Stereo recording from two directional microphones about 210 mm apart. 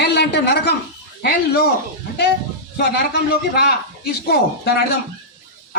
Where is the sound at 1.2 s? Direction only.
50° left (ahead or behind).